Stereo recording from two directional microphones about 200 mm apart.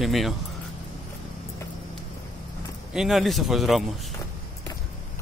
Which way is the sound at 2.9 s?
Centre (ahead or behind).